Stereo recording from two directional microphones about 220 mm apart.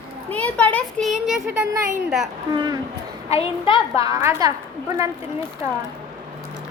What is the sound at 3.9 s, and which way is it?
Speech, 15° right (ahead or behind).